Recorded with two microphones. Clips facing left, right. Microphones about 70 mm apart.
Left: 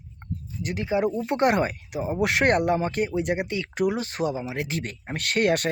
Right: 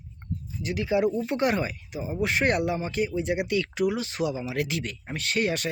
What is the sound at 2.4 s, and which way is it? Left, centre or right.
Speech, left.